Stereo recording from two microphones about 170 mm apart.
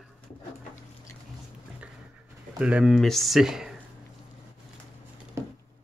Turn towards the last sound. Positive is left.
turn(degrees=-15)  # may be behind; listen again after turning